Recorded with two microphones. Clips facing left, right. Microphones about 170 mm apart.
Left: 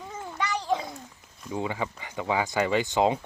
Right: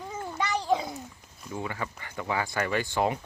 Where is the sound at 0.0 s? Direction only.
Centre (ahead or behind).